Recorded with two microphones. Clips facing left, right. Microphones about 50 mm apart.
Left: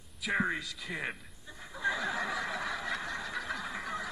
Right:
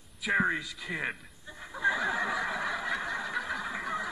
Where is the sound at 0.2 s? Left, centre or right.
Centre.